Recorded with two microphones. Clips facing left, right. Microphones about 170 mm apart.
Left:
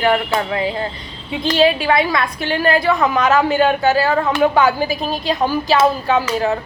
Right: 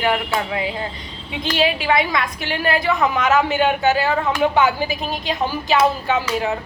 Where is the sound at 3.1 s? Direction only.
35° left (ahead or behind).